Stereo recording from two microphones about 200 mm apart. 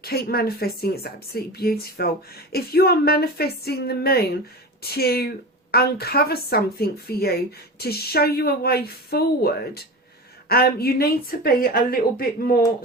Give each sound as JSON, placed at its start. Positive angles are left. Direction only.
{"t": 0.0, "sound": "speech", "side_deg": 50}